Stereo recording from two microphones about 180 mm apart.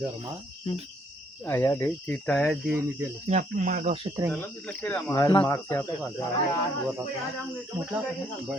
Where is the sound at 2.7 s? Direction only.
15° right (ahead or behind).